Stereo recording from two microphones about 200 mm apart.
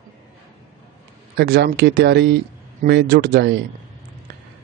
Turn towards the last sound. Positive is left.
turn(degrees=-55)  # may be behind; listen again after turning